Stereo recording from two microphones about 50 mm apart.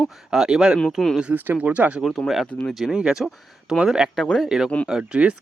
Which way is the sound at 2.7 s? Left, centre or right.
Centre.